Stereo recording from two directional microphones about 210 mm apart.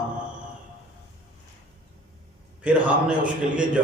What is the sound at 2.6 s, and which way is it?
Speech, 5° right (ahead or behind).